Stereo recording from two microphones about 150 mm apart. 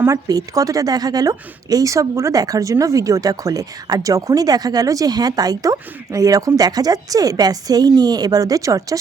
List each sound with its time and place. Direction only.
0.0 s a woman's voice: 25° right (ahead or behind)